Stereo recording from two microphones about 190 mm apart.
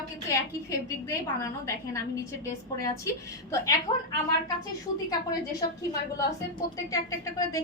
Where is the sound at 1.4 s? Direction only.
15° left (ahead or behind).